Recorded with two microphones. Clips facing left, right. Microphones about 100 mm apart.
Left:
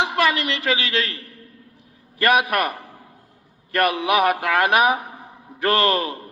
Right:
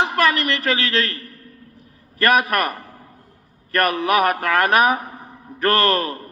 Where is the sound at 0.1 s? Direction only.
15° left (ahead or behind).